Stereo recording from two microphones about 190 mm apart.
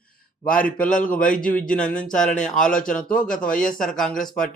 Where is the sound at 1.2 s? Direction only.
45° left (ahead or behind).